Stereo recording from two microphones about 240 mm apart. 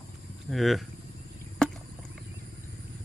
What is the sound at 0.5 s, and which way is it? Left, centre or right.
Speech, centre.